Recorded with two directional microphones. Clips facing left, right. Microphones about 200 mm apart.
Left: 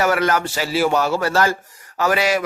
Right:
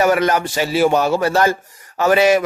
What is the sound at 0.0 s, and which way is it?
A man's voice, 20° right (ahead or behind).